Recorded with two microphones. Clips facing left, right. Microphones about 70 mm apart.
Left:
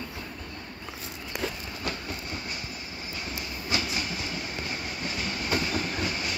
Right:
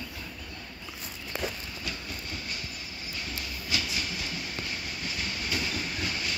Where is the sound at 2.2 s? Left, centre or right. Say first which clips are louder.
Left 2 dB; left.